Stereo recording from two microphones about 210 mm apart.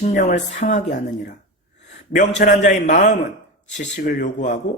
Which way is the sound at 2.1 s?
35° left (ahead or behind).